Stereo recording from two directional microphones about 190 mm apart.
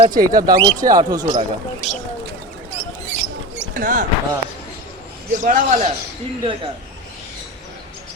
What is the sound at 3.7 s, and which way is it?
Speech, 45° right (ahead or behind).